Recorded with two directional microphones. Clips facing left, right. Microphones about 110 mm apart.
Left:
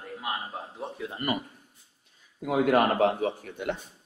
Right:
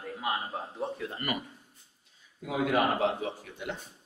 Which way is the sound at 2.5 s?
55° left (ahead or behind).